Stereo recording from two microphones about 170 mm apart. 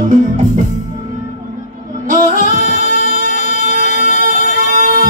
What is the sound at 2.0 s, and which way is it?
Music, 50° right (ahead or behind).